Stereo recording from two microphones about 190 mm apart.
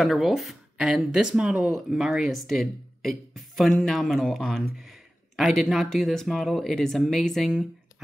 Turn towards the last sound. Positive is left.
turn(degrees=0)  # may be behind; listen again after turning